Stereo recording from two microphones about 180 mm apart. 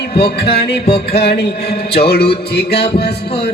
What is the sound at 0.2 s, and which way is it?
Music, 65° left (ahead or behind).